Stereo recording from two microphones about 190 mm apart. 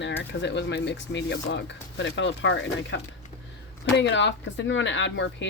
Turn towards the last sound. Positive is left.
turn(degrees=70)  # may be behind; listen again after turning